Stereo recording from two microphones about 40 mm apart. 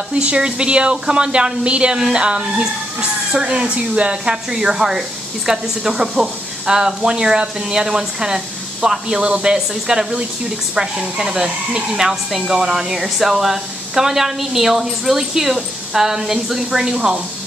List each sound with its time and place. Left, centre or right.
0.1 s a woman's voice: right
9.2 s speech: right
9.5 s speech: centre